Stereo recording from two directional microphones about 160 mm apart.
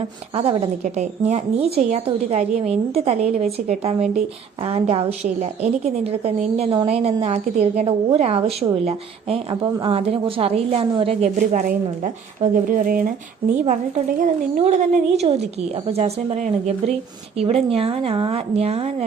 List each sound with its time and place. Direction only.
0.3 s a woman's voice: 35° right (ahead or behind)
11.3 s a woman's voice: 55° right (ahead or behind); by 19.0 s 40° right (ahead or behind)